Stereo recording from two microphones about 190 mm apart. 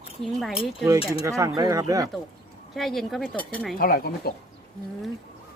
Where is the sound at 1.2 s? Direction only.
15° right (ahead or behind).